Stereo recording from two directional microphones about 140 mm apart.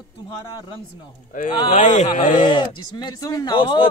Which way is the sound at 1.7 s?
60° left (ahead or behind).